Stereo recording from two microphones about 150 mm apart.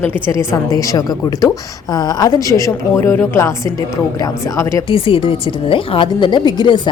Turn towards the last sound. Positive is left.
turn(degrees=30)  # may be behind; listen again after turning